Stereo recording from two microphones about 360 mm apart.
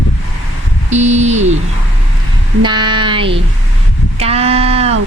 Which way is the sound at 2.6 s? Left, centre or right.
Centre.